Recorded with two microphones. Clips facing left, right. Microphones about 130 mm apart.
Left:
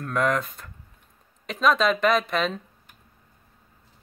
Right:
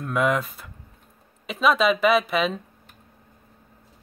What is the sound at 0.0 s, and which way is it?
Speech, 5° right (ahead or behind).